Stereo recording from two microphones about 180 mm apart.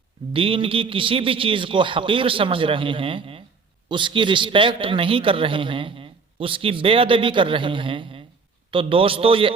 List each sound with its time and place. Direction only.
0.3 s a man's voice: 30° right (ahead or behind)